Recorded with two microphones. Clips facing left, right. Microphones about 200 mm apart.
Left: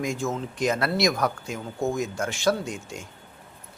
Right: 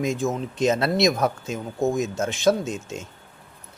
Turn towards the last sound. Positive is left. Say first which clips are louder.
# right 4 dB
turn(degrees=-20)  # may be behind; listen again after turning